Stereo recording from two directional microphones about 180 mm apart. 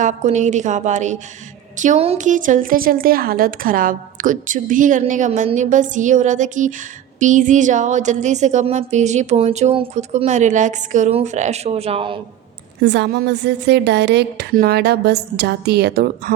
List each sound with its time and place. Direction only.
0.0 s a woman's voice: 40° right (ahead or behind)
12.8 s a woman's voice: 75° right (ahead or behind); by 16.3 s 60° right (ahead or behind)